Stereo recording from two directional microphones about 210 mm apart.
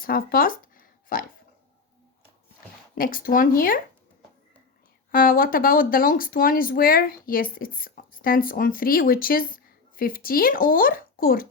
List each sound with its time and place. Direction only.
0.0 s a sound: 45° left (ahead or behind)
2.9 s speech: 40° left (ahead or behind)
5.1 s speech: 40° left (ahead or behind)